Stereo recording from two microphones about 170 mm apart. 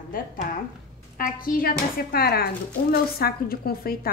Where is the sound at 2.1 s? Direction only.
65° left (ahead or behind).